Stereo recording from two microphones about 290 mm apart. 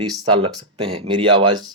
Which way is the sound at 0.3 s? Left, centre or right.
Centre.